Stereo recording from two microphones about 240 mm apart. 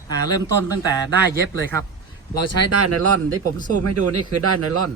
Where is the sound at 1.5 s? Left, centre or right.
Centre.